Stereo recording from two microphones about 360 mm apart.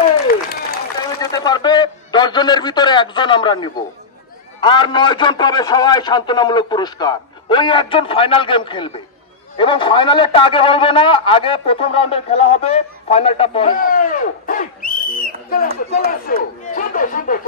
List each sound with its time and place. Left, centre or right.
1.2 s a man's voice: centre